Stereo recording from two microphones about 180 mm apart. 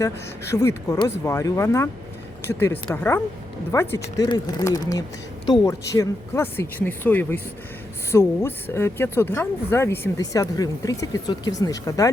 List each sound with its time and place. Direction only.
0.5 s speech: 15° left (ahead or behind)